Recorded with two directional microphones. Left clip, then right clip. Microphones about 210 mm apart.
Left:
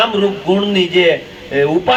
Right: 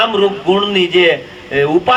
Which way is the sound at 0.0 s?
40° right (ahead or behind).